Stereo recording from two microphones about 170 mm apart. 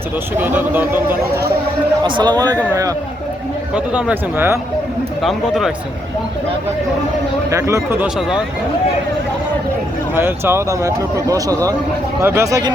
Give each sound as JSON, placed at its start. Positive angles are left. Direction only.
{"t": 0.3, "sound": "speech", "side_deg": -10}
{"t": 2.0, "sound": "speech", "side_deg": -25}
{"t": 3.8, "sound": "speech", "side_deg": -5}
{"t": 5.2, "sound": "speech", "side_deg": 0}
{"t": 7.5, "sound": "speech", "side_deg": -15}
{"t": 8.0, "sound": "speech", "side_deg": -5}
{"t": 10.2, "sound": "speech", "side_deg": -15}